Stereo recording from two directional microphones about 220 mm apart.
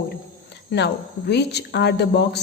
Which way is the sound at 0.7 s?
50° left (ahead or behind).